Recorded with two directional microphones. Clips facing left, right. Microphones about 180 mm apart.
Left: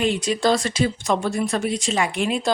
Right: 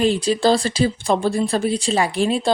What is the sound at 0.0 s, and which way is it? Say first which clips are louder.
Speech: right 3 dB; 35° right (ahead or behind).